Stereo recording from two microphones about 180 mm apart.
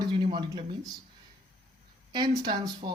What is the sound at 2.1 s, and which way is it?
Speech, 25° right (ahead or behind).